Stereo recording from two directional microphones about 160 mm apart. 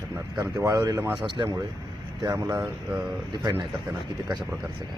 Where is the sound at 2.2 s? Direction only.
20° right (ahead or behind).